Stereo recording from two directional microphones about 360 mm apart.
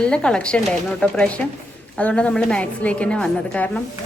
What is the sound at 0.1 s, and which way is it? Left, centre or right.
Speech, centre.